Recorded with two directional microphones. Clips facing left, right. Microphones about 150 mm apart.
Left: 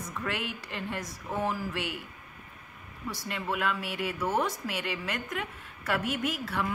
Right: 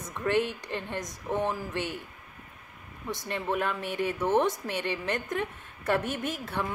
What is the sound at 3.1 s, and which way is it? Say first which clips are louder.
A woman's voice: right 4 dB; 25° right (ahead or behind).